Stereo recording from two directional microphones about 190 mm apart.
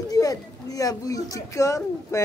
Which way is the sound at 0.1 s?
20° left (ahead or behind).